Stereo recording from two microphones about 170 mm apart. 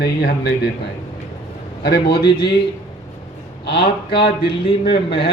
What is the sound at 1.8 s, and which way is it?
Speech, 65° left (ahead or behind).